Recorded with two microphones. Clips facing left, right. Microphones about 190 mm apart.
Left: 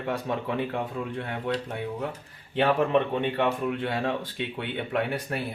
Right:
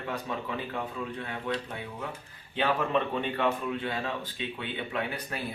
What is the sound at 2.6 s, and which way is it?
Speech, 60° left (ahead or behind).